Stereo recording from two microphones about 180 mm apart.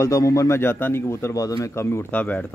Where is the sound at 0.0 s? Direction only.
15° left (ahead or behind).